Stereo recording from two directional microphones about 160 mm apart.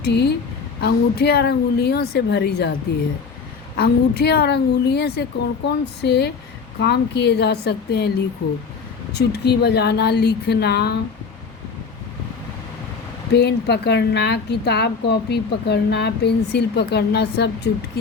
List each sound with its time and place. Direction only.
0.0 s a woman's voice: 90° left
3.8 s a woman's voice: 90° left
9.1 s a woman's voice: 90° left
13.3 s a woman's voice: 90° left